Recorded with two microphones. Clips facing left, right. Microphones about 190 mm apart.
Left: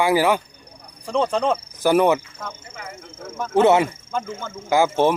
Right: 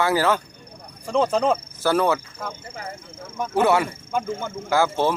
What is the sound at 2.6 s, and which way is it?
Speech, 35° right (ahead or behind).